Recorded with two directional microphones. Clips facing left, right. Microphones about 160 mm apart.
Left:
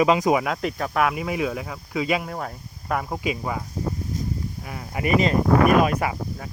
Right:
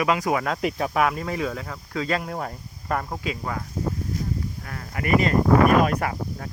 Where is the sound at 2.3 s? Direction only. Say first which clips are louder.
Right 1 dB; centre (ahead or behind).